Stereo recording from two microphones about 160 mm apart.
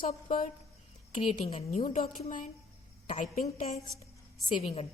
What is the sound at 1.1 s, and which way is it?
Speech, 45° left (ahead or behind).